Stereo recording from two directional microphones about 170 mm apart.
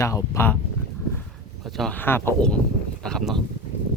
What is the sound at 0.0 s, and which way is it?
Speech, 20° left (ahead or behind).